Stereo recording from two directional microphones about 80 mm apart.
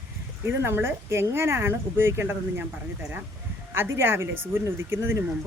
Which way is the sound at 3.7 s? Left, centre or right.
Right.